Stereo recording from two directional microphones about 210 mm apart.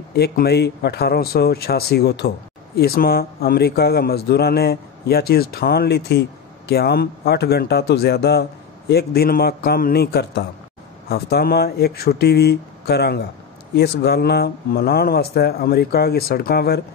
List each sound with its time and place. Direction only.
0.1 s speech: 50° left (ahead or behind)